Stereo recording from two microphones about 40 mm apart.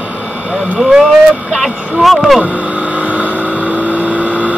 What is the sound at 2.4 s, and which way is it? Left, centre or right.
Vehicle, right.